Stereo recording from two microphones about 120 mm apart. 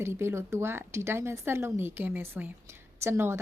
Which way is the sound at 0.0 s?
20° right (ahead or behind).